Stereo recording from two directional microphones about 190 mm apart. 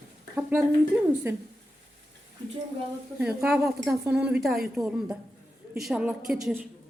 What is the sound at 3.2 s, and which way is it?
A woman's voice, 5° right (ahead or behind).